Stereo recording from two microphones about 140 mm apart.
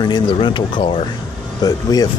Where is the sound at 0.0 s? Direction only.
35° left (ahead or behind).